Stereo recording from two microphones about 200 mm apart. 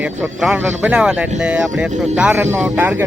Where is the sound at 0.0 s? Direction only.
5° right (ahead or behind).